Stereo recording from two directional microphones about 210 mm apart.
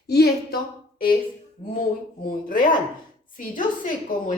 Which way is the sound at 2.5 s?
40° left (ahead or behind).